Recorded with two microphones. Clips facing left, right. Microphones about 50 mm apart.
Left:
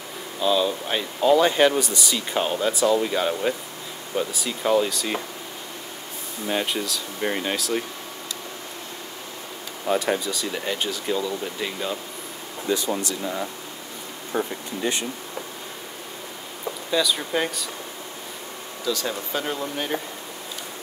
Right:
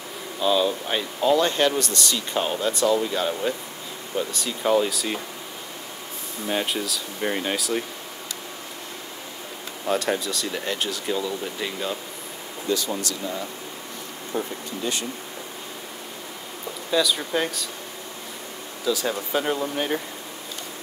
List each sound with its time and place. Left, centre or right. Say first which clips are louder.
0.4 s speech: even; centre
6.4 s speech: even; centre
9.8 s speech: left 1 dB; centre
12.6 s speech: left 1 dB; left
16.9 s speech: right 1 dB; centre
18.9 s speech: right 2 dB; centre